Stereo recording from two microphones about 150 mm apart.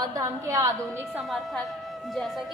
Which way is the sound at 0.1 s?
25° right (ahead or behind).